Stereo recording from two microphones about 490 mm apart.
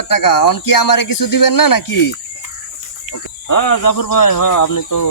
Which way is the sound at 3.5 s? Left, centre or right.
Left.